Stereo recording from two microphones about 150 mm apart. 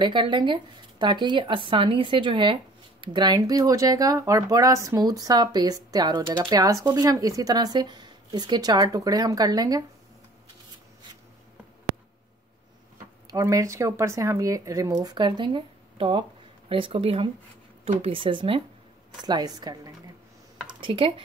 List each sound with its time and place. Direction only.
0.0 s speech: 30° right (ahead or behind)
13.3 s speech: 20° right (ahead or behind)
20.6 s computer keyboard: 35° right (ahead or behind)